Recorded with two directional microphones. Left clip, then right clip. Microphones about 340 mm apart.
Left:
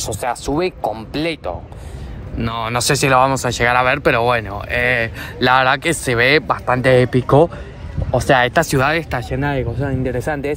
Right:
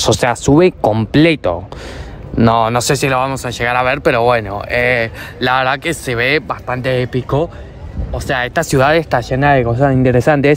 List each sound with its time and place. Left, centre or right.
0.2 s speech: right